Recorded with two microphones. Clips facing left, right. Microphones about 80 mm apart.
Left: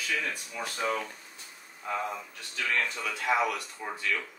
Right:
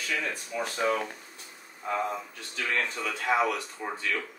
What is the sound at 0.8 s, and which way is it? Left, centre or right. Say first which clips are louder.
Speech: right 3 dB; right.